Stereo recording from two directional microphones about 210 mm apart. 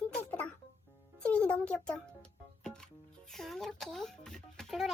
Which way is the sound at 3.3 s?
Centre (ahead or behind).